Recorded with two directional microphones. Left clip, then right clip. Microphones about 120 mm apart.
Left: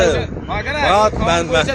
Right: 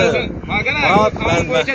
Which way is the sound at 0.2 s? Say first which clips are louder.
Right 3 dB; 40° left (ahead or behind).